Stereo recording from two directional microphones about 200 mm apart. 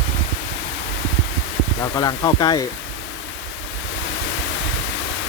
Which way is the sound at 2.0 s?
20° left (ahead or behind).